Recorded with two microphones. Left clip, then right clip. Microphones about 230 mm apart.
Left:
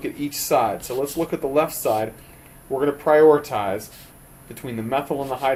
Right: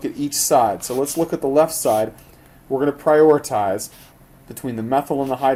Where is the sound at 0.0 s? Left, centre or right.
Right.